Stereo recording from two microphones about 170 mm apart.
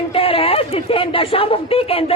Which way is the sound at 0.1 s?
35° left (ahead or behind).